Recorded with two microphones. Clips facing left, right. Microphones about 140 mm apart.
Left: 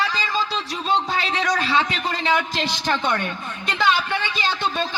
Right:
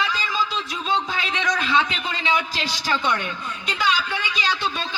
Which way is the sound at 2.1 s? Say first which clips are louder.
Left 2 dB; 55° left (ahead or behind).